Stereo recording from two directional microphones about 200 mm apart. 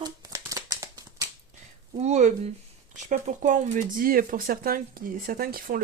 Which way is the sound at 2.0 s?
35° right (ahead or behind).